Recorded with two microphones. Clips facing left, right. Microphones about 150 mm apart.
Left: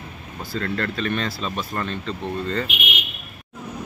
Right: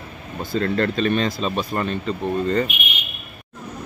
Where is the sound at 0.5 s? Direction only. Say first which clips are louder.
Right 5 dB; 20° right (ahead or behind).